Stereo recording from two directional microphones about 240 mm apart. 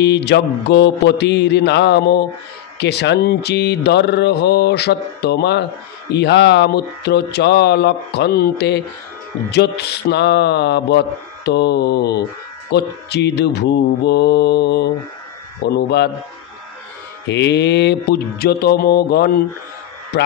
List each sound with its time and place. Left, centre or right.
0.0 s speech: left
17.3 s mantra: left